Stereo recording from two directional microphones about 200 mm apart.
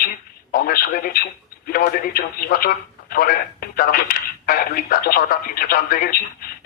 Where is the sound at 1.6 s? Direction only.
45° left (ahead or behind).